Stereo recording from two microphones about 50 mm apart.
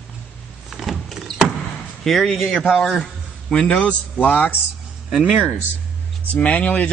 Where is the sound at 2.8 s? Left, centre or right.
Centre.